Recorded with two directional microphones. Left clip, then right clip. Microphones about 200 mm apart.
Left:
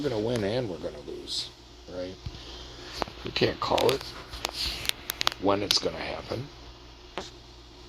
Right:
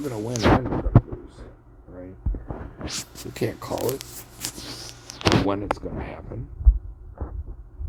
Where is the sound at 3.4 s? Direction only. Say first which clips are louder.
Left 3 dB; 10° right (ahead or behind).